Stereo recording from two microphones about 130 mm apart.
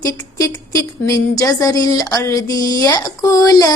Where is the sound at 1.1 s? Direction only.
25° left (ahead or behind).